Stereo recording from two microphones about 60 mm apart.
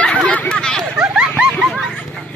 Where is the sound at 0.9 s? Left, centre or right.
Centre.